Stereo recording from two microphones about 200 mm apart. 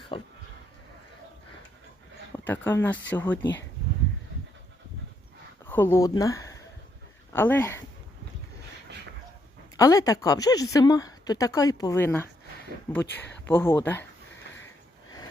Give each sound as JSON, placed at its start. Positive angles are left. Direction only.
{"t": 0.1, "sound": "speech", "side_deg": 25}
{"t": 2.5, "sound": "a woman's voice", "side_deg": 10}
{"t": 5.6, "sound": "a woman's voice", "side_deg": 10}
{"t": 9.7, "sound": "a woman's voice", "side_deg": 15}